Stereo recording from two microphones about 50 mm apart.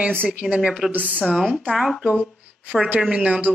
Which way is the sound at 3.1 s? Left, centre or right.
Right.